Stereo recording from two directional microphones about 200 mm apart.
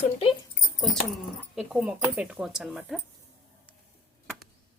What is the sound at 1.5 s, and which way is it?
A woman's voice, 5° right (ahead or behind).